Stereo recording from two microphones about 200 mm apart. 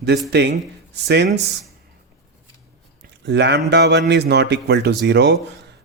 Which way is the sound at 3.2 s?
60° right (ahead or behind).